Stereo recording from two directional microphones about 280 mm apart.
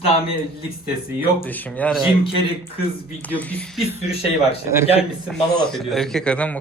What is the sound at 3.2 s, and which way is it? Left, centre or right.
A man's voice, centre.